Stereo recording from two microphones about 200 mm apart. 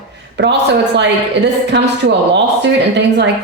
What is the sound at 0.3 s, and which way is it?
A woman's voice, 60° right (ahead or behind).